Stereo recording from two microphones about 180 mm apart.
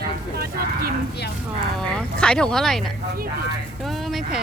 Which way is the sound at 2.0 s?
5° left (ahead or behind).